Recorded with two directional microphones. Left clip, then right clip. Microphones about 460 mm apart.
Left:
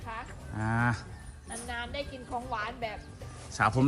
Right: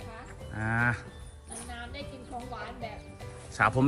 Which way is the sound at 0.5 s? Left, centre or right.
Centre.